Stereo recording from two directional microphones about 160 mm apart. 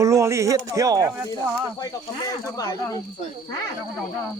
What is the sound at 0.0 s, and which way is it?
Speech, 20° right (ahead or behind).